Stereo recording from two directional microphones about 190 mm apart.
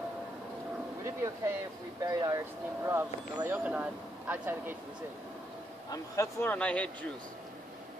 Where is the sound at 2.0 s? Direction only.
20° right (ahead or behind).